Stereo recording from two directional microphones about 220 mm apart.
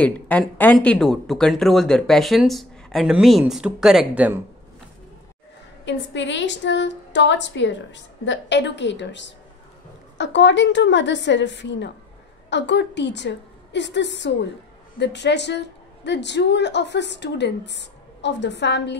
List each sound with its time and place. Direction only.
0.0 s speech: 5° left (ahead or behind)
5.9 s a woman's voice: 55° left (ahead or behind)